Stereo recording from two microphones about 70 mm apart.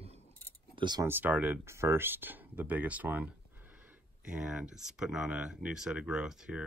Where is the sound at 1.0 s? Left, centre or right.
Right.